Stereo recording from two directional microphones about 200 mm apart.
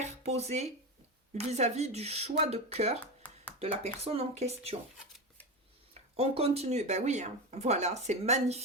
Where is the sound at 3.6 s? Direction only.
30° right (ahead or behind).